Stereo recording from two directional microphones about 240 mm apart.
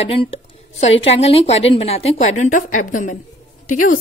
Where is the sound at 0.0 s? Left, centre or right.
Left.